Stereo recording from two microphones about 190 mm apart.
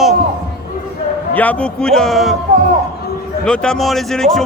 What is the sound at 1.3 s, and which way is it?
A man's voice, 10° left (ahead or behind).